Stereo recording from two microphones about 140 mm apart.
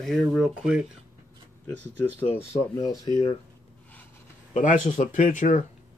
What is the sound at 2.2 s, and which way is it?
Speech, 15° left (ahead or behind).